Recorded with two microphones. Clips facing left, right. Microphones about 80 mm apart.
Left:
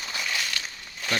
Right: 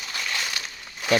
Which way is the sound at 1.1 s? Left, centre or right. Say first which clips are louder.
Right 7 dB; centre.